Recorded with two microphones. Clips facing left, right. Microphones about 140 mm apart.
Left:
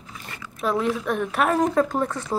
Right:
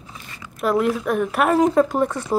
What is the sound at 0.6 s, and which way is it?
Speech, 5° right (ahead or behind).